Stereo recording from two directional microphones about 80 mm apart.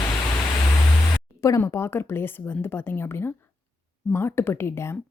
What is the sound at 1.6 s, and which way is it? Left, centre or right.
A woman's voice, left.